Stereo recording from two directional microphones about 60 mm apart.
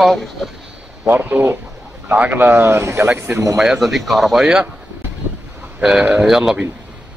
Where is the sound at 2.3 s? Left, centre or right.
Right.